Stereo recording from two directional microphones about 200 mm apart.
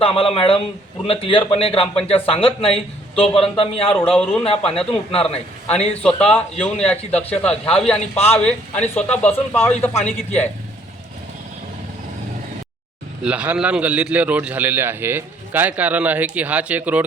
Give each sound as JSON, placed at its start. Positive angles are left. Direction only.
{"t": 0.0, "sound": "a man's voice", "side_deg": 30}
{"t": 4.1, "sound": "a man's voice", "side_deg": 5}
{"t": 4.4, "sound": "a man's voice", "side_deg": 30}
{"t": 6.0, "sound": "a man's voice", "side_deg": 5}
{"t": 13.2, "sound": "a man's voice", "side_deg": -5}